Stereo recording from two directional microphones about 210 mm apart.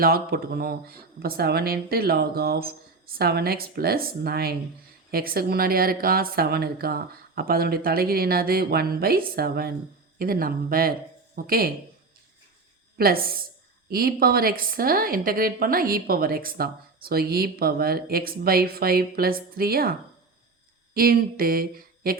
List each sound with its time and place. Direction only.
0.0 s speech: 45° right (ahead or behind)
13.0 s speech: 45° right (ahead or behind)